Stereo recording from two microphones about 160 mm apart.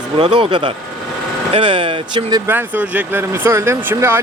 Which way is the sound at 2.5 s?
10° right (ahead or behind).